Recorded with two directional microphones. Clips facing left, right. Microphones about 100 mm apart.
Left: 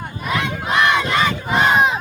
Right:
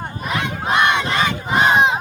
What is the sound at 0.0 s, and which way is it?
Battle cry, 30° right (ahead or behind).